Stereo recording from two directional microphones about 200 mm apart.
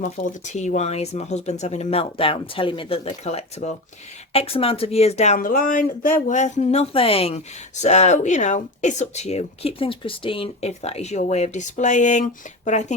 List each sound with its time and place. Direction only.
0.0 s speech: 35° left (ahead or behind)